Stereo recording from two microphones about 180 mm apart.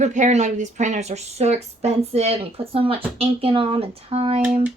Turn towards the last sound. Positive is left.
turn(degrees=-35)  # may be behind; listen again after turning